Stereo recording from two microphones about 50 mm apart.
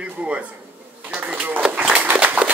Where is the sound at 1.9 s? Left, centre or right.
Right.